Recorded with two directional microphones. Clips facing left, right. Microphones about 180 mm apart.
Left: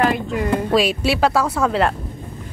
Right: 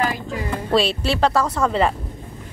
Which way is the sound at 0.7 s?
10° left (ahead or behind).